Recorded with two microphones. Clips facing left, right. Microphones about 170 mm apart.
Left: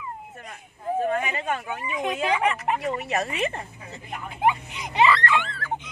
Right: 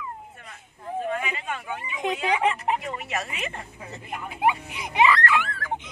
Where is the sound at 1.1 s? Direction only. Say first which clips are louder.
Left 4 dB; 45° left (ahead or behind).